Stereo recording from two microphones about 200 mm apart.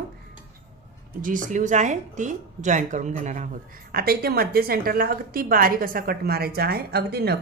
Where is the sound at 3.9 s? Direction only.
50° right (ahead or behind).